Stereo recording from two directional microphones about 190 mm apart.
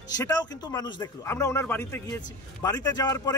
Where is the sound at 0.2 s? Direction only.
20° left (ahead or behind).